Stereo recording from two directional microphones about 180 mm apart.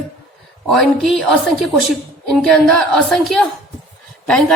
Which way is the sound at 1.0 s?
Centre (ahead or behind).